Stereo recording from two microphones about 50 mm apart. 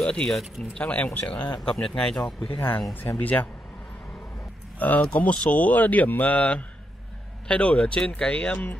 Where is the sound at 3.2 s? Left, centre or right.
Left.